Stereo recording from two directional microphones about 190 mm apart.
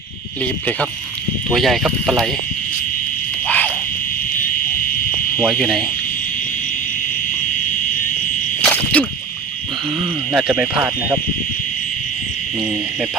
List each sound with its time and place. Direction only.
1.5 s speech: centre (ahead or behind)
3.4 s a sound: 10° left (ahead or behind)
5.4 s speech: 5° left (ahead or behind)
8.6 s cricket: 5° left (ahead or behind)
10.3 s speech: 5° right (ahead or behind)